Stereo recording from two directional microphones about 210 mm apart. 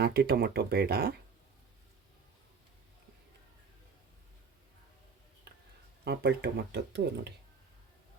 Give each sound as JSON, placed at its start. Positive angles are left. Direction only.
{"t": 0.0, "sound": "speech", "side_deg": -50}
{"t": 6.1, "sound": "speech", "side_deg": -50}